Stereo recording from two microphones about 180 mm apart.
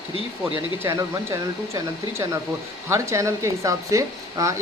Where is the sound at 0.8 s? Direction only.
15° right (ahead or behind).